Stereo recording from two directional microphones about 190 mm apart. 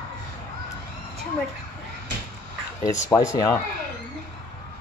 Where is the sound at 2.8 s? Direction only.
15° left (ahead or behind).